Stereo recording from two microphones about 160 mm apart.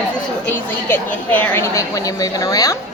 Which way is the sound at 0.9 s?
10° left (ahead or behind).